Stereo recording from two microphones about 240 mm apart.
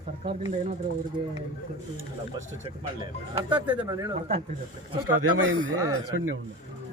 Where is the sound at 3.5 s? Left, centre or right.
Centre.